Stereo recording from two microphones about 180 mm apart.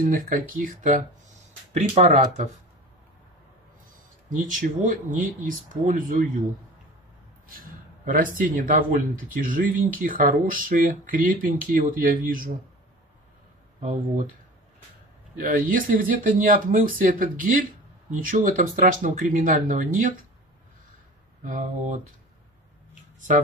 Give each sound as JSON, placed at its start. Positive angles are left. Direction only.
{"t": 0.0, "sound": "speech", "side_deg": -50}
{"t": 4.3, "sound": "speech", "side_deg": -45}
{"t": 7.4, "sound": "speech", "side_deg": -50}
{"t": 13.8, "sound": "speech", "side_deg": -45}
{"t": 15.4, "sound": "speech", "side_deg": -50}
{"t": 21.5, "sound": "speech", "side_deg": -45}